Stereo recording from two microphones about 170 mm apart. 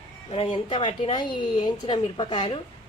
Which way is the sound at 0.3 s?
35° left (ahead or behind).